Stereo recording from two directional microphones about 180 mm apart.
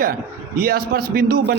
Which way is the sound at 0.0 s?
55° right (ahead or behind).